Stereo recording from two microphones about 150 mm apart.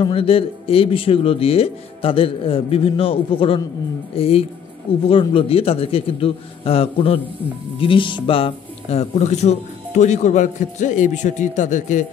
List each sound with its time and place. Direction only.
0.0 s speech: 40° left (ahead or behind); by 12.1 s 55° left (ahead or behind)